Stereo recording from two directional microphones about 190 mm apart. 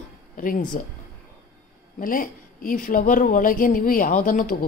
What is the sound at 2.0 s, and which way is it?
Speech, 45° left (ahead or behind).